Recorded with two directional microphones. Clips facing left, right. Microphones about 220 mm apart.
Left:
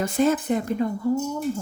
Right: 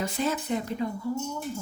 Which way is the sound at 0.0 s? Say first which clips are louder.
Left 8 dB; 50° left (ahead or behind).